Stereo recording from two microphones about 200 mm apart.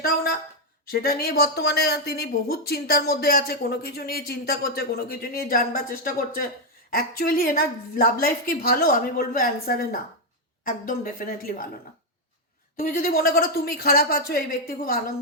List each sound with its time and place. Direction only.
0.0 s speech: 50° left (ahead or behind)
12.7 s speech: 45° left (ahead or behind)